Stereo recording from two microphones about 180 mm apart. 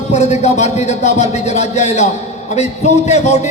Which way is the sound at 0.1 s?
40° left (ahead or behind).